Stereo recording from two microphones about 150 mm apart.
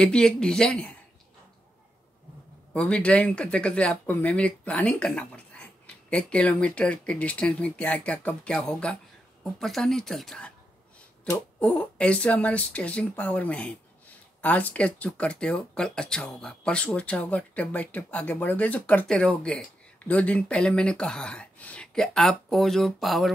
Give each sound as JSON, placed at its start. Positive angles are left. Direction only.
{"t": 0.0, "sound": "speech", "side_deg": 5}
{"t": 2.7, "sound": "speech", "side_deg": 10}
{"t": 11.6, "sound": "speech", "side_deg": 10}